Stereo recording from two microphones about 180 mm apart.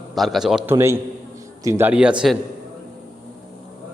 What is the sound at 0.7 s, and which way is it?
A man's voice, 15° right (ahead or behind).